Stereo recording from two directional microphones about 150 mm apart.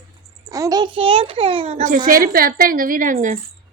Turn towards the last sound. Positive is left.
turn(degrees=-60)  # may be behind; listen again after turning